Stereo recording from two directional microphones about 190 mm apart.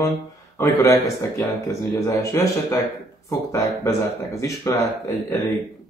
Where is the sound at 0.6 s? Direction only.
15° left (ahead or behind).